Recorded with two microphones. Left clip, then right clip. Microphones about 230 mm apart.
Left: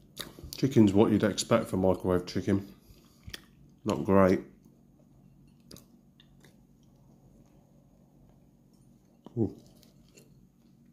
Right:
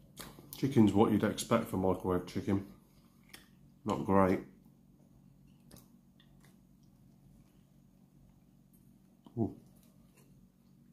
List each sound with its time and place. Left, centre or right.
0.1 s speech: centre
3.8 s speech: left